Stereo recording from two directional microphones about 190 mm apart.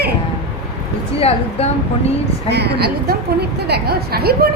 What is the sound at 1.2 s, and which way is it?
Speech, 30° left (ahead or behind).